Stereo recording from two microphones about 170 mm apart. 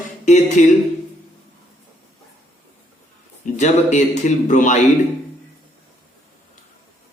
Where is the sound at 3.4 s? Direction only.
45° left (ahead or behind).